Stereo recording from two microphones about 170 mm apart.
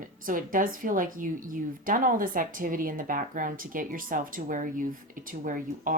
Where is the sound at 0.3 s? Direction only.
55° right (ahead or behind).